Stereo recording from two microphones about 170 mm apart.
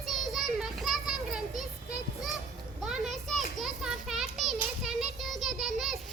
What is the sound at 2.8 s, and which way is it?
Children playing, centre (ahead or behind).